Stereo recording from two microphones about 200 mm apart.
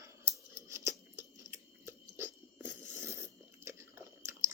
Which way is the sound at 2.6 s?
15° right (ahead or behind).